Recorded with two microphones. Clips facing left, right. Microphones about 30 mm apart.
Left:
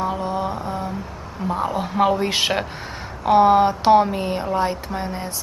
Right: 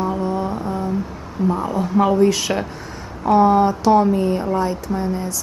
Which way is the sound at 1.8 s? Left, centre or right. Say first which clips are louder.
Right 4 dB; left.